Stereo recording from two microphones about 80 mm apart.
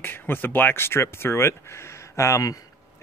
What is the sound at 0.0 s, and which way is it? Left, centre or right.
Speech, left.